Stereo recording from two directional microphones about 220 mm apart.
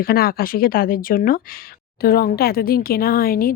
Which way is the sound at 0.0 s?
45° left (ahead or behind).